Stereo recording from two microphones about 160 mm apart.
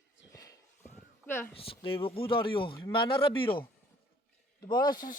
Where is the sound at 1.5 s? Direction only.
35° left (ahead or behind).